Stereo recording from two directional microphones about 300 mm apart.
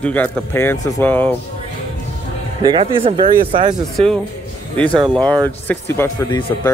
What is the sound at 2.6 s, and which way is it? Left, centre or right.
Speech, centre.